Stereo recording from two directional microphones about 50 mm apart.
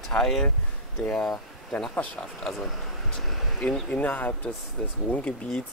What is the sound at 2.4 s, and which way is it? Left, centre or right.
Speech, centre.